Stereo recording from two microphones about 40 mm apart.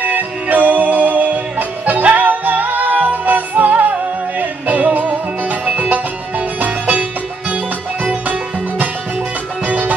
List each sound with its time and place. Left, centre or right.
0.0 s music: right
7.0 s music: right